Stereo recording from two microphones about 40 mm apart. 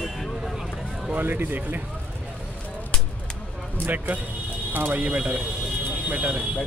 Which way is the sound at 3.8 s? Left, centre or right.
Right.